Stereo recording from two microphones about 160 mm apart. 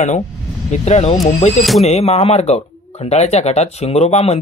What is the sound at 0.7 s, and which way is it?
Speech, 45° left (ahead or behind).